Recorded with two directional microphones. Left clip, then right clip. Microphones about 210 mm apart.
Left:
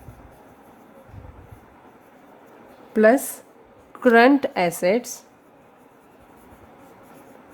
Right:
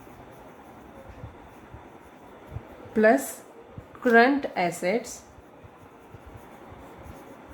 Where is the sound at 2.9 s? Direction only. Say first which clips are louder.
Left 4 dB; 50° left (ahead or behind).